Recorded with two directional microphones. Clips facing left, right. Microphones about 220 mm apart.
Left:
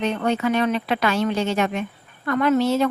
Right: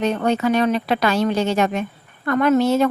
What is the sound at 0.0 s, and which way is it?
Speech, 40° right (ahead or behind).